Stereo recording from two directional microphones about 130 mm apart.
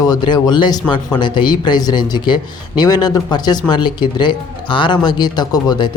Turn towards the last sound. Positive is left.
turn(degrees=30)  # may be behind; listen again after turning